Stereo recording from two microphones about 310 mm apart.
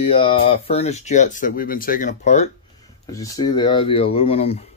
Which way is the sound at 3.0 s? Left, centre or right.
Centre.